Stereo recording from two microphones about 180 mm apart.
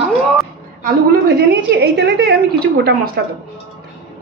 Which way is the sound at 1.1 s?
60° right (ahead or behind).